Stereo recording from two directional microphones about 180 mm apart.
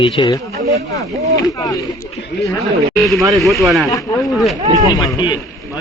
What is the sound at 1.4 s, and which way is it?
Speech, 20° left (ahead or behind).